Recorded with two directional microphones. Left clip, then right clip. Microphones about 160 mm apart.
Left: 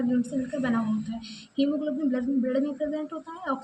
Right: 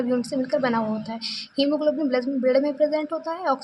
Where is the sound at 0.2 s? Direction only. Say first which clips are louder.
Right 6 dB; 35° right (ahead or behind).